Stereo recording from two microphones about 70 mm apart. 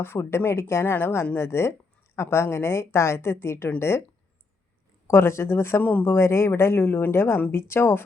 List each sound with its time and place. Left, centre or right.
0.0 s speech: left
5.0 s speech: left